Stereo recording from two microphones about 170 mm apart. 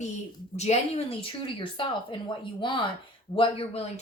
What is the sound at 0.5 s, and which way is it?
Speech, 40° left (ahead or behind).